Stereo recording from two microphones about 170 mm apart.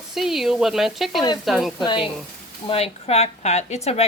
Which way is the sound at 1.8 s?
25° left (ahead or behind).